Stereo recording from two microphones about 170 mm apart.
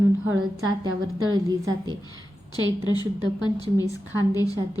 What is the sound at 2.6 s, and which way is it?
A woman's voice, 25° left (ahead or behind).